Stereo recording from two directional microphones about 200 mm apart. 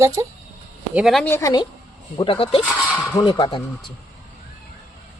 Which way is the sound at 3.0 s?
20° left (ahead or behind).